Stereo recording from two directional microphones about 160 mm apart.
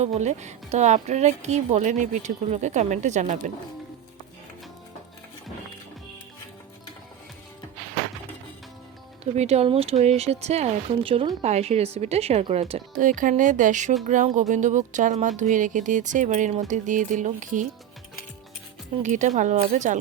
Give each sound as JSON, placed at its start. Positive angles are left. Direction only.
{"t": 0.0, "sound": "speech", "side_deg": -45}
{"t": 9.2, "sound": "speech", "side_deg": -40}
{"t": 13.0, "sound": "speech", "side_deg": -55}
{"t": 19.0, "sound": "speech", "side_deg": -50}